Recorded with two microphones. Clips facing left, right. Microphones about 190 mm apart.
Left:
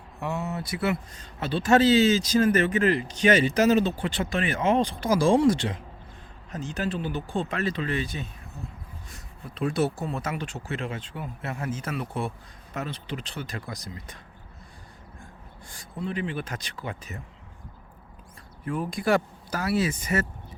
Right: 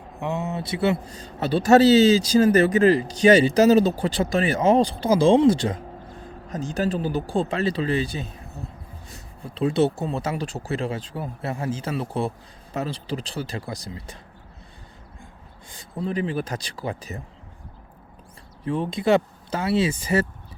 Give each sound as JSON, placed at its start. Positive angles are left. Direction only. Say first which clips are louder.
{"t": 0.2, "sound": "speech", "louder": "right 3 dB", "side_deg": -20}
{"t": 5.5, "sound": "a man's voice", "louder": "right 5 dB", "side_deg": -40}
{"t": 9.6, "sound": "speech", "louder": "right 5 dB", "side_deg": -25}
{"t": 15.7, "sound": "speech", "louder": "right 4 dB", "side_deg": -25}
{"t": 16.0, "sound": "speech", "louder": "right 5 dB", "side_deg": -35}
{"t": 18.6, "sound": "speech", "louder": "right 4 dB", "side_deg": -25}